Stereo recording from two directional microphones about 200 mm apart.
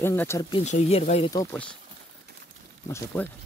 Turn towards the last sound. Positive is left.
turn(degrees=10)  # may be behind; listen again after turning